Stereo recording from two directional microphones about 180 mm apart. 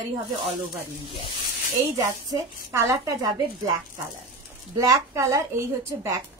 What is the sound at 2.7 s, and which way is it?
Speech, 15° right (ahead or behind).